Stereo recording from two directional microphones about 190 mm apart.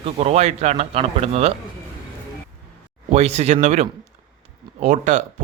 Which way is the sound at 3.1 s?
35° right (ahead or behind).